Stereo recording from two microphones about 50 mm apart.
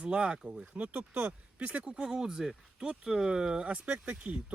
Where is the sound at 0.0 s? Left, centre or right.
Right.